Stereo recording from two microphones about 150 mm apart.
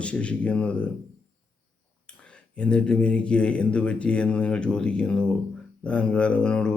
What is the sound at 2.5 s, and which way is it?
Speech, 5° left (ahead or behind).